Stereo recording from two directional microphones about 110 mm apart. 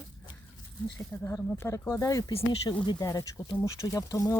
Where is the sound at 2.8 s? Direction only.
35° left (ahead or behind).